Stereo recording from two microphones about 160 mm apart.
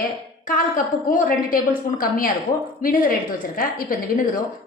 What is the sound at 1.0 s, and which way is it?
A woman's voice, 60° left (ahead or behind).